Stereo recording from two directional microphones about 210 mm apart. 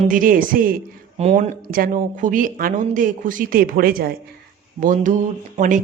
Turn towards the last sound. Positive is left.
turn(degrees=-35)  # may be behind; listen again after turning